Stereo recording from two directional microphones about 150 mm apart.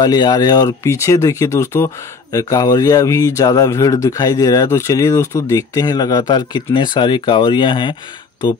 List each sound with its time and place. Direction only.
0.0 s speech: 25° left (ahead or behind)